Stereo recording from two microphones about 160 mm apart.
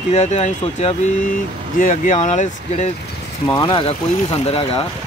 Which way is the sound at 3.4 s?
25° left (ahead or behind).